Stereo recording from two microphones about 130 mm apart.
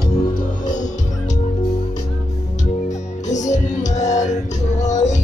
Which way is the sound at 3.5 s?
65° left (ahead or behind).